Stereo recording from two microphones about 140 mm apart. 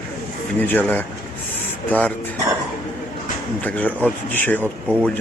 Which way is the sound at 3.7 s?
10° left (ahead or behind).